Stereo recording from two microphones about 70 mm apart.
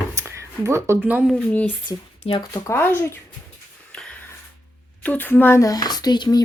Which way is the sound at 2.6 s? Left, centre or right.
Left.